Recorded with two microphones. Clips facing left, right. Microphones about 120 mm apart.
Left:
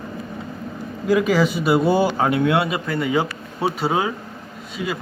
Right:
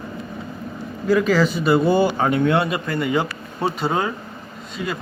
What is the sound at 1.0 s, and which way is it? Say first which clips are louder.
Speech: even; 15° left (ahead or behind).